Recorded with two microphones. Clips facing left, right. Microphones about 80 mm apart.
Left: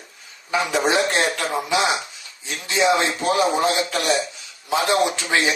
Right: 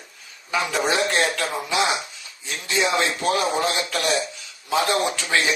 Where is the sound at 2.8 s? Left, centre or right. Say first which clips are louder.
Left 4 dB; left.